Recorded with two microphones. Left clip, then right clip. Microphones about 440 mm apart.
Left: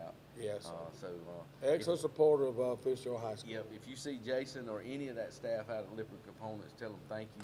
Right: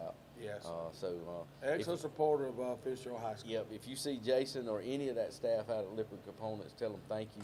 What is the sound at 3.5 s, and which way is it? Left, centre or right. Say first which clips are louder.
Speech: right 4 dB; right.